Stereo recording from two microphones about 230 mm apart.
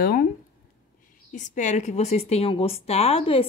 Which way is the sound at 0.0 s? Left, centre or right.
Left.